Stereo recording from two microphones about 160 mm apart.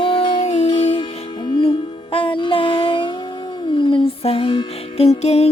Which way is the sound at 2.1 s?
30° left (ahead or behind).